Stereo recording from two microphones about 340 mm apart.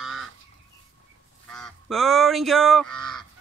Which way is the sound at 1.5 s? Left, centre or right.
Centre.